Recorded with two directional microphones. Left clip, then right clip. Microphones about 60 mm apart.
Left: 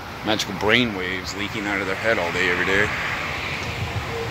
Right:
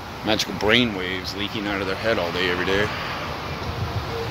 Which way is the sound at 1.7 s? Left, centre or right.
Right.